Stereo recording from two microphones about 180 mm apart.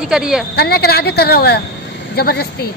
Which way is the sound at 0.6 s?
60° left (ahead or behind).